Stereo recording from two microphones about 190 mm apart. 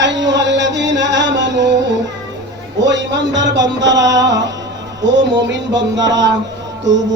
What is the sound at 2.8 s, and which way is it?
Music, 70° right (ahead or behind).